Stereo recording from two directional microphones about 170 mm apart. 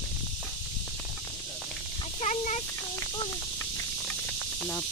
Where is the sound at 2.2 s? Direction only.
45° left (ahead or behind).